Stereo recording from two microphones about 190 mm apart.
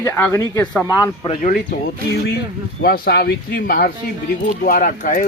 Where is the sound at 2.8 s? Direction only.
55° left (ahead or behind).